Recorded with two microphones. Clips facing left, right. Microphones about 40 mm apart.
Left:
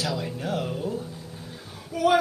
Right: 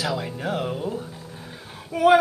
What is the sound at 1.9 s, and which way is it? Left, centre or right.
Female singing, right.